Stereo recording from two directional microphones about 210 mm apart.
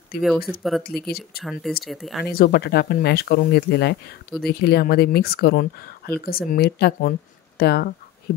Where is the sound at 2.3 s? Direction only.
45° left (ahead or behind).